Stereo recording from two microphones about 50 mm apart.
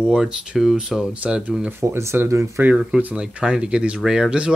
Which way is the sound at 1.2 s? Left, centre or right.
Right.